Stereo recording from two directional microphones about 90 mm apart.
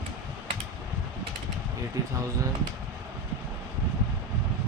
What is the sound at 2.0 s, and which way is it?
Speech, 40° right (ahead or behind).